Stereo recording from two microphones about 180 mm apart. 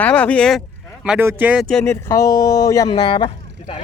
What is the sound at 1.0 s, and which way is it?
Speech, 10° right (ahead or behind).